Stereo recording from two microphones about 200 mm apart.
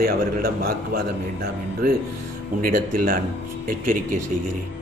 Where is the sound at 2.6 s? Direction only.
45° right (ahead or behind).